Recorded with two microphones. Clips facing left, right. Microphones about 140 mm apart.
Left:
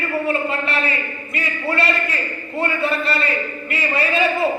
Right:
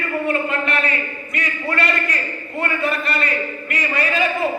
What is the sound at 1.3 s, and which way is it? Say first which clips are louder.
Speech: left 1 dB; 30° left (ahead or behind).